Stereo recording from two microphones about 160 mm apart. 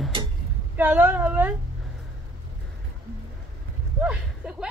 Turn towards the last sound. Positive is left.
turn(degrees=-5)  # may be behind; listen again after turning